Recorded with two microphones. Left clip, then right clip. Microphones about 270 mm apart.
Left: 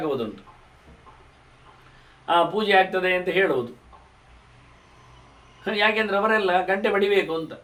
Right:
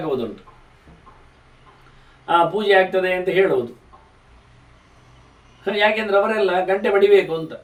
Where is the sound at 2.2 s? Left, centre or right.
Centre.